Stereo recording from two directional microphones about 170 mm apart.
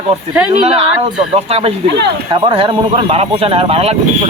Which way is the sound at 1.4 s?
35° right (ahead or behind).